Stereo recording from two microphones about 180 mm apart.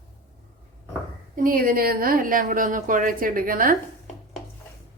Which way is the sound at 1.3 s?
50° right (ahead or behind).